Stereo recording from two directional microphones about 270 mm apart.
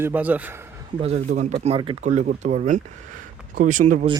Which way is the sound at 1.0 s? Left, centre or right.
Right.